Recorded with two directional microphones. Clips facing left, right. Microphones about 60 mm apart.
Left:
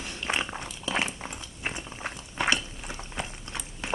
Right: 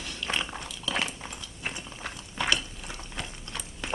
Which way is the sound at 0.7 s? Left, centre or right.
Left.